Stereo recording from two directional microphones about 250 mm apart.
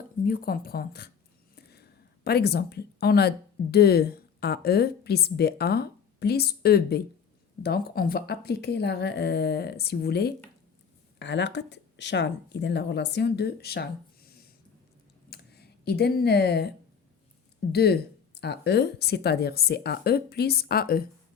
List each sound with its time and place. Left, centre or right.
0.3 s a woman's voice: left
15.3 s a sound: left
17.7 s speech: left